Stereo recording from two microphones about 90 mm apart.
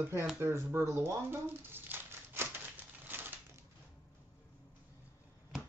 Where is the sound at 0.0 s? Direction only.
25° right (ahead or behind).